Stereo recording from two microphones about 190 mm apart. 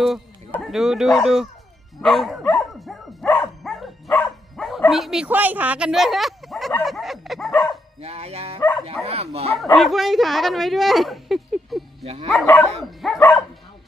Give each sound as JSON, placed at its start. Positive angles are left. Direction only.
{"t": 0.0, "sound": "speech", "side_deg": 0}
{"t": 2.0, "sound": "dog", "side_deg": 0}
{"t": 8.0, "sound": "speech", "side_deg": -35}
{"t": 9.6, "sound": "speech", "side_deg": 0}
{"t": 12.0, "sound": "speech", "side_deg": -30}
{"t": 12.3, "sound": "speech", "side_deg": 5}